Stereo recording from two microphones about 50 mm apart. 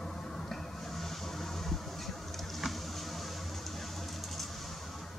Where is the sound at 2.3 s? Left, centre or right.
Centre.